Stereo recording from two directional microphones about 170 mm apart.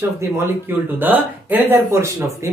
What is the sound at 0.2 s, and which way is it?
Speech, 10° right (ahead or behind).